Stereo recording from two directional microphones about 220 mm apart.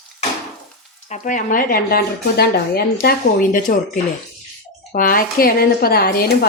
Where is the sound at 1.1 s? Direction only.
35° left (ahead or behind).